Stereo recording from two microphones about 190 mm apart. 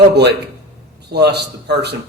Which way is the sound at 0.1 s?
60° right (ahead or behind).